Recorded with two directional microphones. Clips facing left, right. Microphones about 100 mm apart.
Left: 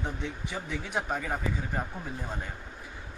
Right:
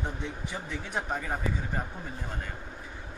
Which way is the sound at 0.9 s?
Centre (ahead or behind).